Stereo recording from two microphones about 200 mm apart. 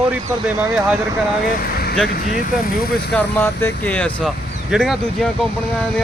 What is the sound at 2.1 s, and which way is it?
Speech, 45° left (ahead or behind).